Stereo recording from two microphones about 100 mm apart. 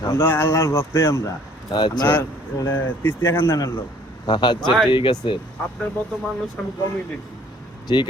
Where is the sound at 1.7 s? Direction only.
45° left (ahead or behind).